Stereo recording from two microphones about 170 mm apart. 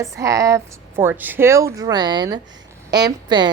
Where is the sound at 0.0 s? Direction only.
20° right (ahead or behind).